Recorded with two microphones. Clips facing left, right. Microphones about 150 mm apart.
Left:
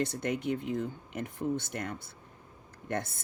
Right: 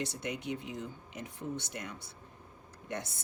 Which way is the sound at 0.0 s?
55° left (ahead or behind).